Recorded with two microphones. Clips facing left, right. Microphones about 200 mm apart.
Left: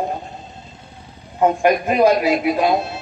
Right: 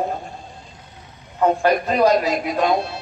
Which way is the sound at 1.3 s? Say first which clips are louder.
Left 2 dB; 15° left (ahead or behind).